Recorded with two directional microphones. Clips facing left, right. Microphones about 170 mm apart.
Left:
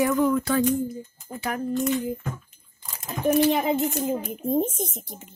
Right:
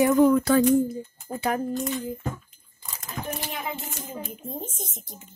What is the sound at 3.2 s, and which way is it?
A child's voice, 70° left (ahead or behind).